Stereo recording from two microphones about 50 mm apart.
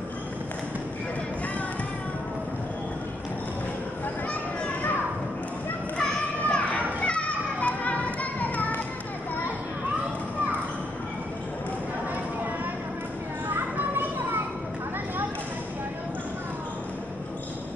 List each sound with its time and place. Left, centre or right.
6.4 s children playing: left
13.7 s children playing: right